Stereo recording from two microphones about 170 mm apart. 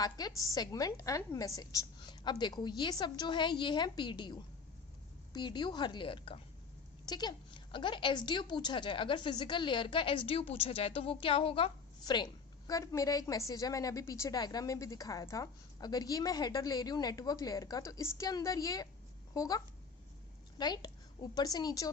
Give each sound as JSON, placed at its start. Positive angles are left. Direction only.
{"t": 0.0, "sound": "a woman's voice", "side_deg": 25}